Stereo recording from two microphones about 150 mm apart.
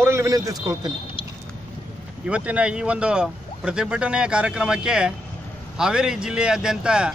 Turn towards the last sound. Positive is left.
turn(degrees=-5)  # may be behind; listen again after turning